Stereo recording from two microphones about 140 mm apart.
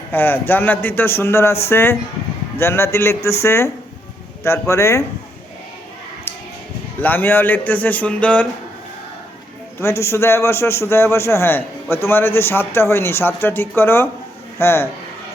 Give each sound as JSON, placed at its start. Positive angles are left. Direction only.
{"t": 0.1, "sound": "a man's voice", "side_deg": 15}
{"t": 7.0, "sound": "a man's voice", "side_deg": 15}
{"t": 9.8, "sound": "a man's voice", "side_deg": 20}